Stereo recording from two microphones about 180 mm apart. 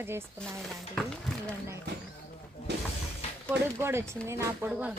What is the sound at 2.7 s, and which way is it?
Speech, 70° right (ahead or behind).